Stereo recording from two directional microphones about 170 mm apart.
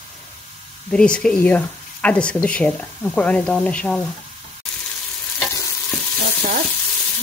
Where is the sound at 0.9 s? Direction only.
5° left (ahead or behind).